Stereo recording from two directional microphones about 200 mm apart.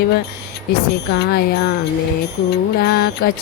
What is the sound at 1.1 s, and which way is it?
Music, 55° left (ahead or behind).